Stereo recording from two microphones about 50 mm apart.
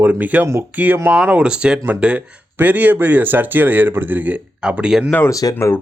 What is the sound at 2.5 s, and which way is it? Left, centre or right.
Speech, right.